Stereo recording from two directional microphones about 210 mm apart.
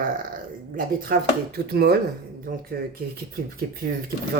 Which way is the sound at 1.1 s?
45° right (ahead or behind).